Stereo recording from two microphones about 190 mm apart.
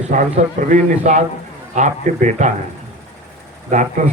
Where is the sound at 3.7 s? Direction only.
40° right (ahead or behind).